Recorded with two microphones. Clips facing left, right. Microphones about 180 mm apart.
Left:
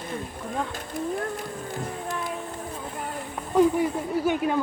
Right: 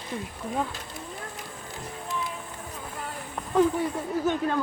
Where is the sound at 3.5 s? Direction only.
10° left (ahead or behind).